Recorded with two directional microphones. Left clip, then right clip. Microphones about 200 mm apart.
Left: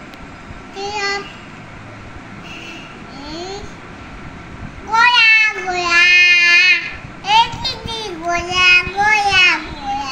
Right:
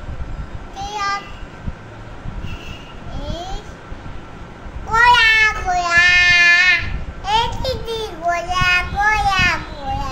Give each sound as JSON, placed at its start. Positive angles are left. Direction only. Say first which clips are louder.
{"t": 0.7, "sound": "child singing", "louder": "left 1 dB", "side_deg": -35}
{"t": 3.3, "sound": "a sound", "louder": "left 1 dB", "side_deg": -35}
{"t": 4.9, "sound": "child singing", "louder": "left 1 dB", "side_deg": -35}